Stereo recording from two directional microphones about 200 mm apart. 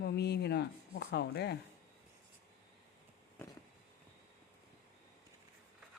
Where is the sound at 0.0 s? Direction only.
55° left (ahead or behind).